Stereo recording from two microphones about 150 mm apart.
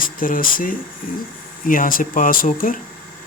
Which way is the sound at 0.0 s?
65° left (ahead or behind).